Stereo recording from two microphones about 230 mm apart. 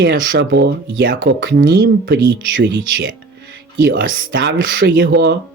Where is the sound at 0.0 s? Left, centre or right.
Right.